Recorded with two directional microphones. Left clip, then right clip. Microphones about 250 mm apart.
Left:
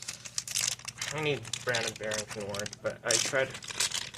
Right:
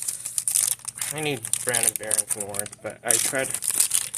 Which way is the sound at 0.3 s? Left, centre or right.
Centre.